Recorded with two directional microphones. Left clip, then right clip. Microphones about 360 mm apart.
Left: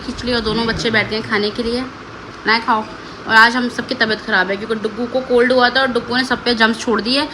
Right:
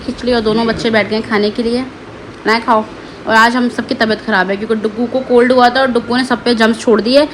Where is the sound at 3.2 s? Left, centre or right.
Centre.